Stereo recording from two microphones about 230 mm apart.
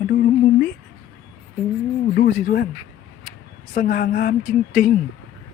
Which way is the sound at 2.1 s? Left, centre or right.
Left.